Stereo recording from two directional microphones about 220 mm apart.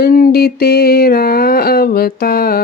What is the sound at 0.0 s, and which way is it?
Mantra, 40° left (ahead or behind).